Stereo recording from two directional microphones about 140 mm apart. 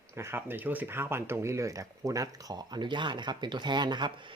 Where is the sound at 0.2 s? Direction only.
15° right (ahead or behind).